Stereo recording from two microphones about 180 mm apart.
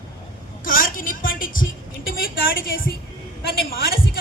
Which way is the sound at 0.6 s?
50° left (ahead or behind).